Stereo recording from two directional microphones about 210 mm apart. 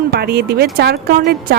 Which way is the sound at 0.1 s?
50° right (ahead or behind).